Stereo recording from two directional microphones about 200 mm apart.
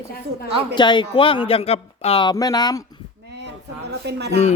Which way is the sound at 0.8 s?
25° left (ahead or behind).